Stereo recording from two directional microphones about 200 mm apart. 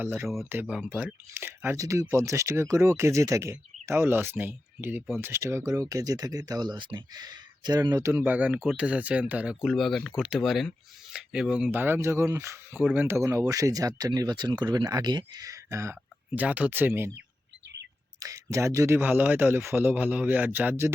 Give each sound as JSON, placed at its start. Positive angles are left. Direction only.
{"t": 0.0, "sound": "speech", "side_deg": -5}
{"t": 18.2, "sound": "a sound", "side_deg": -15}
{"t": 18.5, "sound": "speech", "side_deg": -15}